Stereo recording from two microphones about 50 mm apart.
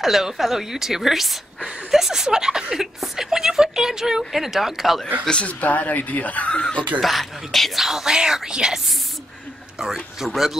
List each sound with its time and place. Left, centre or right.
0.0 s a woman's voice: centre
5.3 s speech: left
7.0 s a woman's voice: centre
7.8 s a man's voice: centre